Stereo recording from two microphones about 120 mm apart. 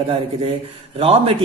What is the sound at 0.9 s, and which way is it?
Speech, 55° right (ahead or behind).